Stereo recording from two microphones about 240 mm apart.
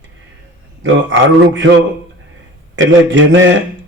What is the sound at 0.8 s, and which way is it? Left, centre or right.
Speech, right.